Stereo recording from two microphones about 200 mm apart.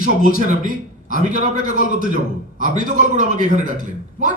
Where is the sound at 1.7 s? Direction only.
45° left (ahead or behind).